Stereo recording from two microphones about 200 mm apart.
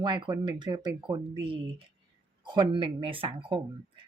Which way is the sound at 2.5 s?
25° right (ahead or behind).